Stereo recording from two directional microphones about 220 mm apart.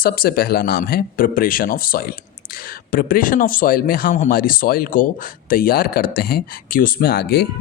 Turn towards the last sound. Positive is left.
turn(degrees=45)  # may be behind; listen again after turning